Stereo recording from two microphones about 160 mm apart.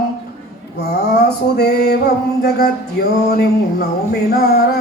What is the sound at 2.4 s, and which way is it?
Music, 85° left.